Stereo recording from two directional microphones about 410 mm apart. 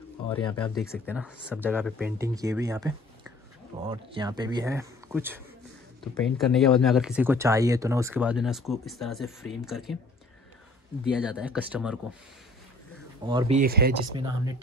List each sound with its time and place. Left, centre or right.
0.3 s speech: centre
11.1 s speech: centre
13.2 s speech: centre
14.1 s speech: centre